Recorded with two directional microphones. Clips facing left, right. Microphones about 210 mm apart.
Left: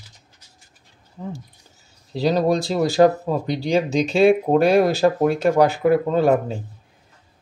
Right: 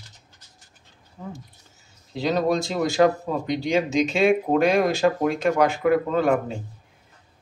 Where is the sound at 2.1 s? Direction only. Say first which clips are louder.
Left 3 dB; 35° left (ahead or behind).